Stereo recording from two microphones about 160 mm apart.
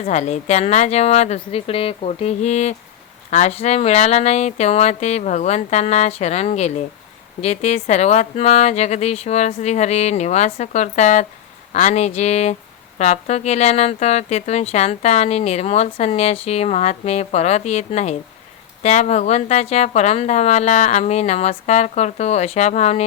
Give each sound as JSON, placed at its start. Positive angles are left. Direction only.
{"t": 0.0, "sound": "speech", "side_deg": 45}